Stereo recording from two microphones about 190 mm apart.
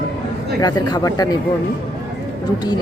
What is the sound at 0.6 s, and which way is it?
Speech, 20° left (ahead or behind).